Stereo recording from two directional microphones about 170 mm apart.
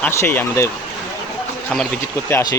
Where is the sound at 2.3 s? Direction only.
15° left (ahead or behind).